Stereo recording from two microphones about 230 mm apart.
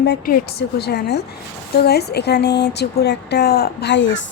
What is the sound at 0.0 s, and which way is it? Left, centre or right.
Speech, left.